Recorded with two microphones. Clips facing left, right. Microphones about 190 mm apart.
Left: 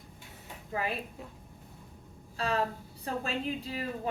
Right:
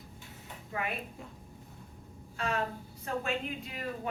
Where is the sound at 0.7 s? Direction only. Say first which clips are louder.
Left 3 dB; 30° left (ahead or behind).